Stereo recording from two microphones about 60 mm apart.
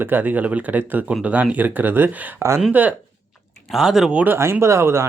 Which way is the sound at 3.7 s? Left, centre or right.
Centre.